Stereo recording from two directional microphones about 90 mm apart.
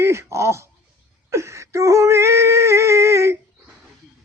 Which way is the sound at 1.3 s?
35° right (ahead or behind).